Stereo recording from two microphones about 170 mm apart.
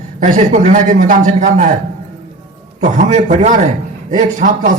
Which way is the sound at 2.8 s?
45° right (ahead or behind).